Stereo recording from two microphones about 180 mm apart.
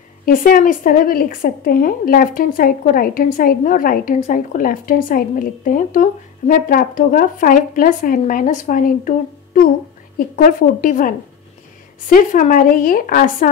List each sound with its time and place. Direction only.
0.2 s a woman's voice: 50° left (ahead or behind)